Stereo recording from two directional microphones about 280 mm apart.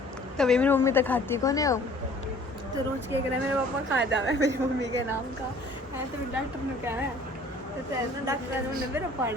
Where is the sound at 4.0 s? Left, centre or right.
Right.